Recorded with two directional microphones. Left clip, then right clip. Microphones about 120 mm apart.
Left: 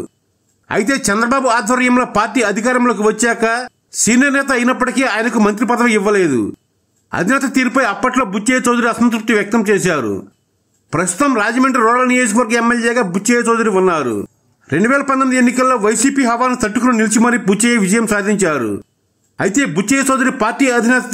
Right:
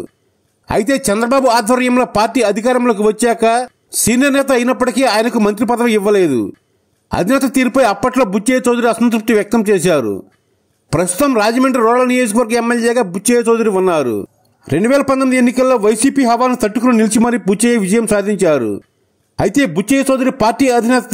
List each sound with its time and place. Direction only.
0.7 s a man's voice: 40° right (ahead or behind)